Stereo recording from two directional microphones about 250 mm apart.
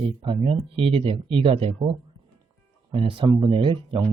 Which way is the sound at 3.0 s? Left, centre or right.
Centre.